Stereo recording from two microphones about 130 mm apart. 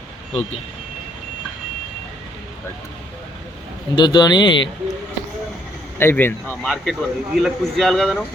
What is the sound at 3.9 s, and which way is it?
Speech, 35° left (ahead or behind).